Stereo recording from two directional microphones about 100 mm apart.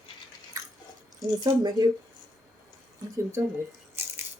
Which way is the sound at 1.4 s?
45° right (ahead or behind).